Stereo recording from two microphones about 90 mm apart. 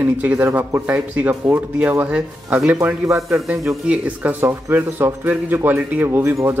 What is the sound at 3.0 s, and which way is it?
Speech, 35° right (ahead or behind).